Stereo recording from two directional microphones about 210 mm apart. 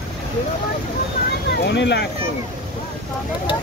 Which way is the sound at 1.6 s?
55° left (ahead or behind).